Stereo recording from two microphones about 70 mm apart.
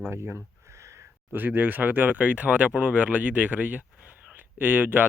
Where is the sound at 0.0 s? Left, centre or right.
Right.